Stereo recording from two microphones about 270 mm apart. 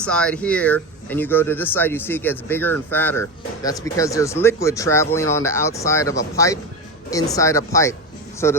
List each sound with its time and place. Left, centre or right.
0.0 s speech: centre